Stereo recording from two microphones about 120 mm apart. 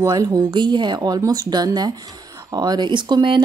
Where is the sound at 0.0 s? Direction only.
30° right (ahead or behind).